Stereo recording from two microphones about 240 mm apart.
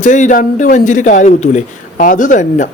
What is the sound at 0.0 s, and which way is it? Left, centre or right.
Speech, left.